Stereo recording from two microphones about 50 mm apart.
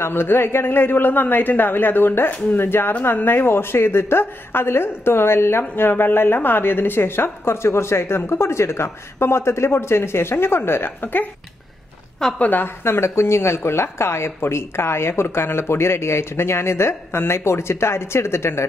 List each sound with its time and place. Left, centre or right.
0.0 s speech: left
11.0 s speech: left
12.4 s speech: left
12.8 s speech: left